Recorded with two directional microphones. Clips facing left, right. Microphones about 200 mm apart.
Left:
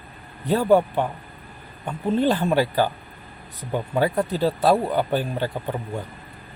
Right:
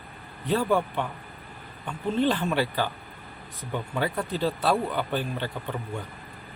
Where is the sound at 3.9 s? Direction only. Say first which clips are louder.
Left 7 dB; 40° left (ahead or behind).